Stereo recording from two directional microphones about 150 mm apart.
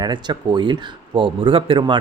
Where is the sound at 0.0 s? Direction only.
30° right (ahead or behind).